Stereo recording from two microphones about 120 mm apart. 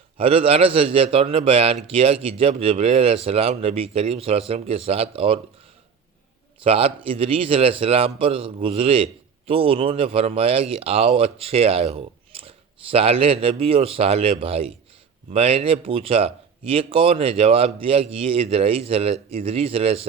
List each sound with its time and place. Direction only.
0.2 s speech: 50° right (ahead or behind)
6.6 s speech: 50° right (ahead or behind)